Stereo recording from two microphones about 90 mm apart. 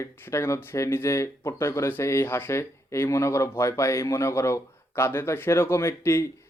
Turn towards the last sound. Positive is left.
turn(degrees=30)  # may be behind; listen again after turning